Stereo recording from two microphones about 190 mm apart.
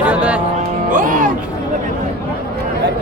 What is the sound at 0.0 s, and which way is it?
Music, 5° right (ahead or behind).